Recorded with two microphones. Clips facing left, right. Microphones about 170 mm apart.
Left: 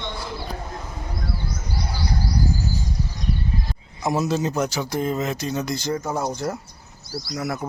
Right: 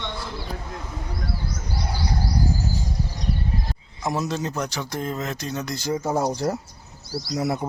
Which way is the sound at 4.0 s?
5° left (ahead or behind).